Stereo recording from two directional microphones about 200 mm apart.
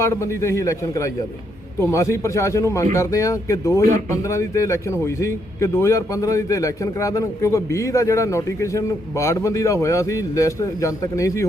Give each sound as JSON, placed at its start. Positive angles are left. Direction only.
{"t": 0.0, "sound": "speech", "side_deg": 15}